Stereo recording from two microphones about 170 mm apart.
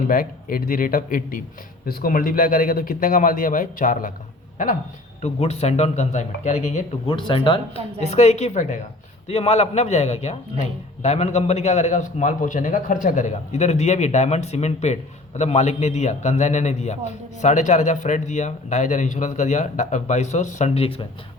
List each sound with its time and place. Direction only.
0.1 s speech: 55° left (ahead or behind)
5.2 s a man's voice: 40° left (ahead or behind)
7.1 s speech: 30° left (ahead or behind)
8.0 s a man's voice: 40° left (ahead or behind)